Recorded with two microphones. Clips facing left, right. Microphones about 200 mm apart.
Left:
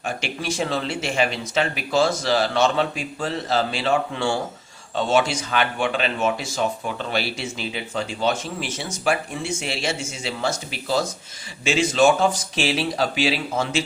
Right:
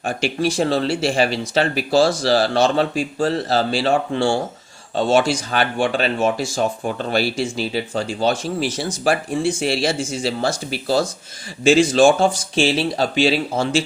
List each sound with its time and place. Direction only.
0.0 s speech: 35° right (ahead or behind)